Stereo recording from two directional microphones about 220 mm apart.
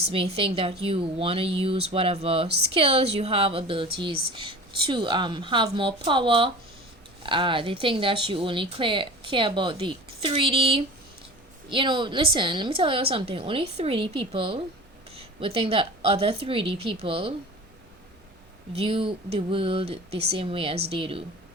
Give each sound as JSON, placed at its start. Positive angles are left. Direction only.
{"t": 0.0, "sound": "speech", "side_deg": -25}
{"t": 18.7, "sound": "speech", "side_deg": -25}